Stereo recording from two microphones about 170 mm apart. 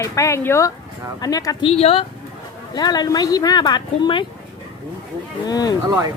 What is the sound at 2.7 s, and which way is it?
Speech, 25° left (ahead or behind).